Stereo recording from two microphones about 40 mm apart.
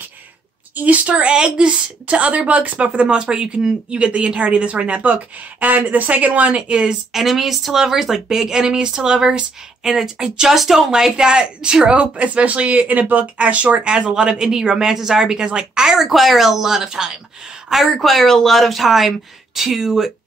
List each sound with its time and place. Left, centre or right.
0.7 s a woman's voice: right
6.7 s speech: right
7.1 s speech: centre
10.5 s speech: centre
10.9 s a woman's voice: centre; by 13.7 s right
13.8 s speech: right
17.9 s speech: centre